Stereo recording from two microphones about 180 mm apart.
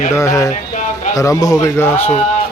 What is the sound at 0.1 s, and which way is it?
A man's voice, 15° left (ahead or behind).